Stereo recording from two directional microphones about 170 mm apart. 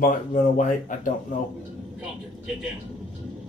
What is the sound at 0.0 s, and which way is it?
Speech, 50° left (ahead or behind).